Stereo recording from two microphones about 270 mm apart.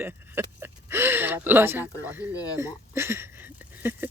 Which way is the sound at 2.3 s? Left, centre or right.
Centre.